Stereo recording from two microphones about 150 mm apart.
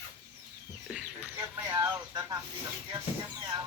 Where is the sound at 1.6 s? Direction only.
15° right (ahead or behind).